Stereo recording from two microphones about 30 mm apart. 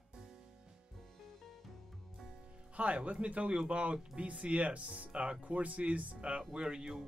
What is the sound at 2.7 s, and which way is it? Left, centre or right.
Speech, right.